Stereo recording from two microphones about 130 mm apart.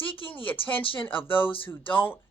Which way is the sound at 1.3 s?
40° left (ahead or behind).